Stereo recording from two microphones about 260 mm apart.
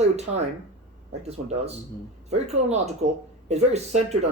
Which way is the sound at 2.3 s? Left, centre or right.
Right.